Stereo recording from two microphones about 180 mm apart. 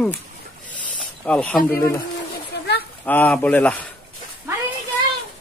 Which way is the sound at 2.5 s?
70° left (ahead or behind).